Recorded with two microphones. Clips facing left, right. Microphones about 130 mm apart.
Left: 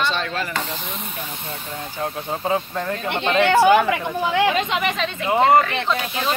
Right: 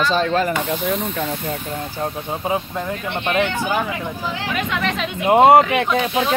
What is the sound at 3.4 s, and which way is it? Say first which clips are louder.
Speech: left 7 dB; 70° left (ahead or behind).